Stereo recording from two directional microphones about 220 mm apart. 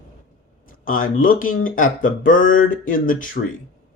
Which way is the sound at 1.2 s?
40° left (ahead or behind).